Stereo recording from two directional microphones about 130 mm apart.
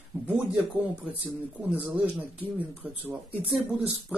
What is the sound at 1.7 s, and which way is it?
Speech, 10° right (ahead or behind).